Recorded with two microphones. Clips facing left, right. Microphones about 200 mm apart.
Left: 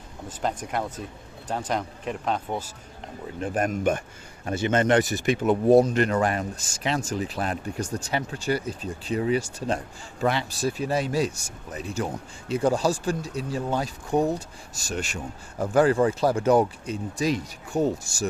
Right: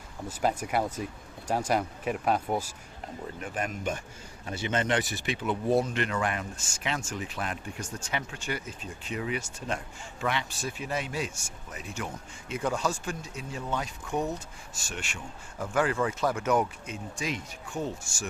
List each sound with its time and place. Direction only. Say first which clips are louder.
0.3 s speech: right 1 dB; 10° right (ahead or behind)
3.5 s speech: left 9 dB; 45° left (ahead or behind)